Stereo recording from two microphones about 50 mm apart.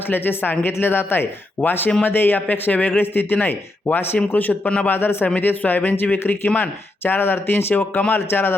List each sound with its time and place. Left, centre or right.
0.1 s a man's voice: left
4.9 s a man's voice: left